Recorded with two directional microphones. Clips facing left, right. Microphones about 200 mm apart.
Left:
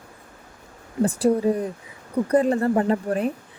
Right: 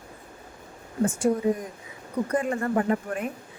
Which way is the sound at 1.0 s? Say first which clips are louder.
Left 3 dB; 35° left (ahead or behind).